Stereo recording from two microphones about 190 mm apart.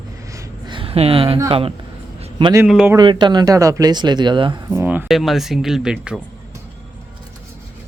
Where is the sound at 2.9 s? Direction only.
25° right (ahead or behind).